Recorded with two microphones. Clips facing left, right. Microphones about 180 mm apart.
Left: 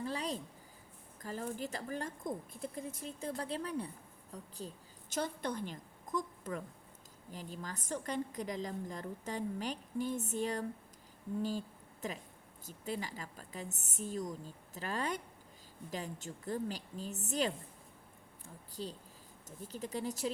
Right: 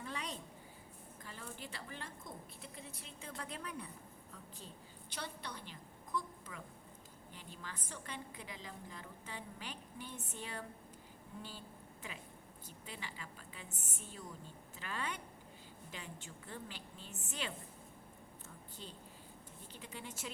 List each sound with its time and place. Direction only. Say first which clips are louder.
0.0 s a sound: left 7 dB; 35° left (ahead or behind)
1.2 s a woman's voice: left 11 dB; 40° left (ahead or behind)
12.6 s a woman's voice: left 11 dB; 40° left (ahead or behind)